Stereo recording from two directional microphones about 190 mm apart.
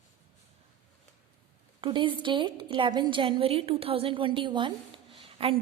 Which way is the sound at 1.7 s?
25° right (ahead or behind).